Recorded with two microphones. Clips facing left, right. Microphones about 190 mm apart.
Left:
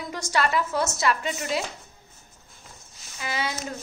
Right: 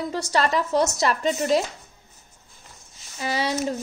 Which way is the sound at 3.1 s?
35° right (ahead or behind).